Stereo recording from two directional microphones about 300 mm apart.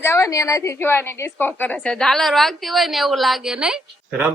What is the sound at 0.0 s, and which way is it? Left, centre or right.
A woman's voice, centre.